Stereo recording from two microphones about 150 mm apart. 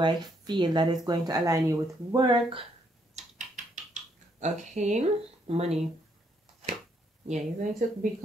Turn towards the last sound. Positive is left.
turn(degrees=-60)  # may be behind; listen again after turning